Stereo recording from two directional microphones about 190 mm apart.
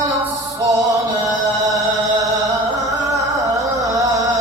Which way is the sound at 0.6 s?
20° right (ahead or behind).